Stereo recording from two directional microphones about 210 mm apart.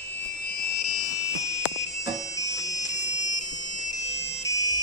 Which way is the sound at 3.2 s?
20° left (ahead or behind).